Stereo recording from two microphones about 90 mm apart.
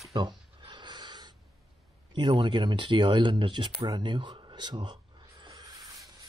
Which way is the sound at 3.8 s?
60° right (ahead or behind).